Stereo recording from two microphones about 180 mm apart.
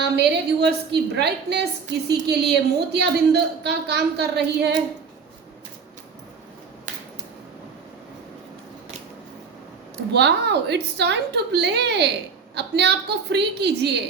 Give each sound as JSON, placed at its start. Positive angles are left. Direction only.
{"t": 0.0, "sound": "a woman's voice", "side_deg": -65}
{"t": 10.1, "sound": "a woman's voice", "side_deg": -70}